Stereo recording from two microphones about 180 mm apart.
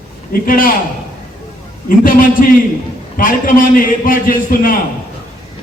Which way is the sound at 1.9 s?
50° left (ahead or behind).